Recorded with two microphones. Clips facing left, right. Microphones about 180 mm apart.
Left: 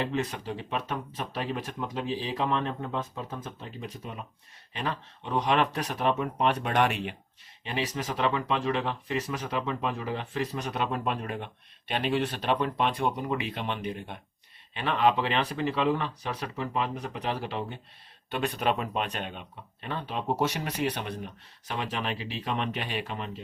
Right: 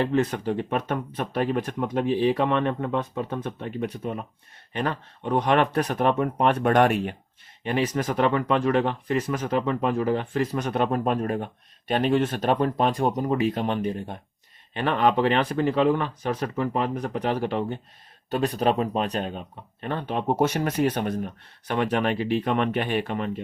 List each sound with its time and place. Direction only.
0.0 s speech: 50° right (ahead or behind)